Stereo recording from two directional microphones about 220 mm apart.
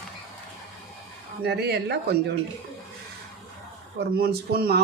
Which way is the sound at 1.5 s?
50° right (ahead or behind).